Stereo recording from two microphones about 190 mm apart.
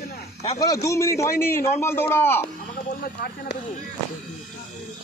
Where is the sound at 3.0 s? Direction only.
55° left (ahead or behind).